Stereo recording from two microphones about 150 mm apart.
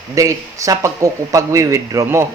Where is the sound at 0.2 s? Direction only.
20° right (ahead or behind).